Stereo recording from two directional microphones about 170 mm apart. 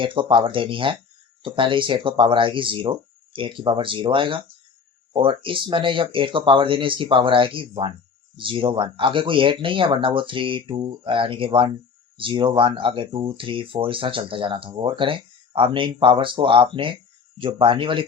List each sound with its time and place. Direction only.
0.0 s speech: 30° right (ahead or behind)